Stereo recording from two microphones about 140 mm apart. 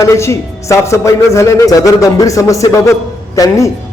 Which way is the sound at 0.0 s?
20° left (ahead or behind).